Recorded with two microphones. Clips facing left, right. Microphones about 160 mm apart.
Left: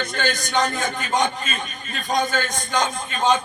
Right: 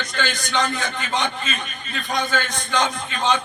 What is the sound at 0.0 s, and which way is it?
A man's voice, 55° left (ahead or behind).